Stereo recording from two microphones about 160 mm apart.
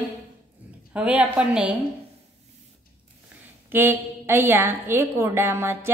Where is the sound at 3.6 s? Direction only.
15° right (ahead or behind).